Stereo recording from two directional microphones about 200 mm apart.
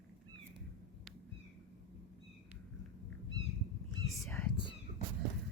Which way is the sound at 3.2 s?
65° left (ahead or behind).